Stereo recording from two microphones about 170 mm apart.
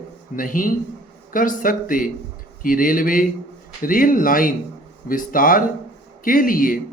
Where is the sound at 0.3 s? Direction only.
55° left (ahead or behind).